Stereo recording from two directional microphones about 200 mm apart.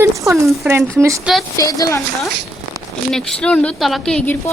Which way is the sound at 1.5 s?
15° left (ahead or behind).